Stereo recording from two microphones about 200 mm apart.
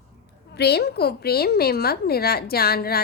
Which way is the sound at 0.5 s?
55° left (ahead or behind).